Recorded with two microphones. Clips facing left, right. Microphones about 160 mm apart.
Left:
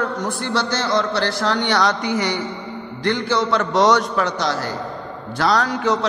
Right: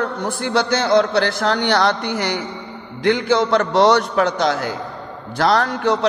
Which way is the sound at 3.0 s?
55° right (ahead or behind).